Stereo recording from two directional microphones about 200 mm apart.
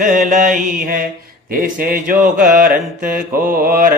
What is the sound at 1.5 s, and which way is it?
Speech, 45° right (ahead or behind).